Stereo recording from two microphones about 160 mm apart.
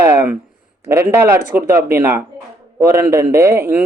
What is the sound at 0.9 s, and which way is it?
Speech, 15° right (ahead or behind).